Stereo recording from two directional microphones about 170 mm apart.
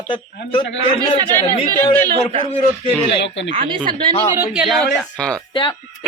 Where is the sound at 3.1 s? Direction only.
90° left.